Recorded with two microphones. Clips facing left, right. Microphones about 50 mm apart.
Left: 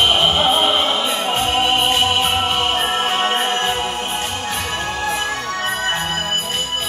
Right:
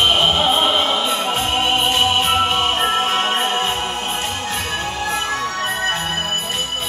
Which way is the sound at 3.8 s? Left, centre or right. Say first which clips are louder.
Left 1 dB; centre.